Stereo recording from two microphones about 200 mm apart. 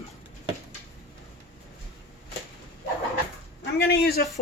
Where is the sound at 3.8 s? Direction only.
50° left (ahead or behind).